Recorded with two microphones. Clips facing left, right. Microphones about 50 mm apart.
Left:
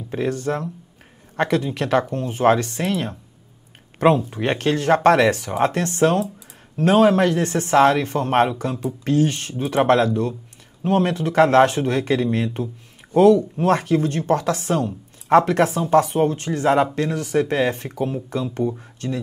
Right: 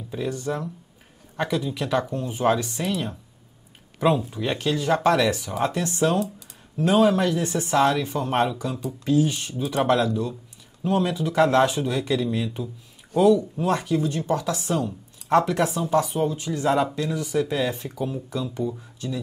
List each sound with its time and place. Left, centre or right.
0.1 s speech: left
4.3 s speech: left
14.9 s a sound: left
15.6 s speech: left
15.9 s speech: left